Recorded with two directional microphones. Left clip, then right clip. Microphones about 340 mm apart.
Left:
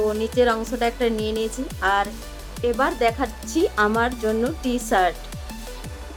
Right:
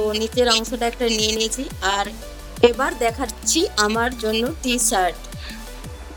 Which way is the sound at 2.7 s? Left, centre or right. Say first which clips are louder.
Left 1 dB; centre.